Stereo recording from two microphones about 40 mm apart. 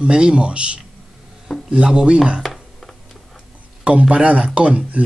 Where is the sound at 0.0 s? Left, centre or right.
Right.